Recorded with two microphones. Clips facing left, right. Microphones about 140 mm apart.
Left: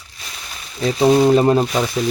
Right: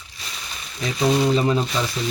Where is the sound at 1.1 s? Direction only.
45° left (ahead or behind).